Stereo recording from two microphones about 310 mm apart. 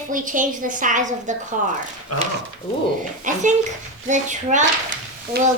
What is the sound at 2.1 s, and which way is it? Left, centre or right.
Speech, left.